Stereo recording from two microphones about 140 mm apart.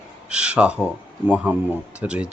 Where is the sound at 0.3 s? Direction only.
10° right (ahead or behind).